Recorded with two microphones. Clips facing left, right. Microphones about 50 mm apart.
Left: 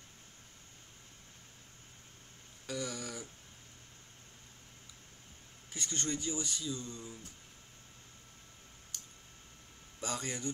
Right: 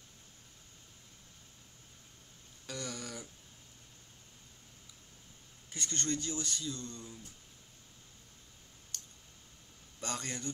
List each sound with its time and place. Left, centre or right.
2.6 s a sound: centre
5.7 s speech: centre
9.9 s speech: centre